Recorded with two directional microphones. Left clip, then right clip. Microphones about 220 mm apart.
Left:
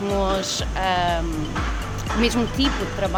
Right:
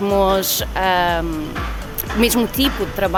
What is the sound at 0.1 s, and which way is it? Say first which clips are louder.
Speech: right 6 dB; 55° right (ahead or behind).